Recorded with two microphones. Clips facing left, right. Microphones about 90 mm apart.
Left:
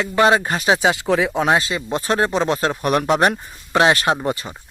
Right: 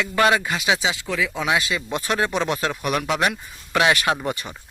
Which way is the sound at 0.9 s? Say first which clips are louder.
Left 7 dB; 60° left (ahead or behind).